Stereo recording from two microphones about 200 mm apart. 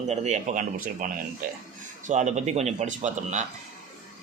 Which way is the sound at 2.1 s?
35° right (ahead or behind).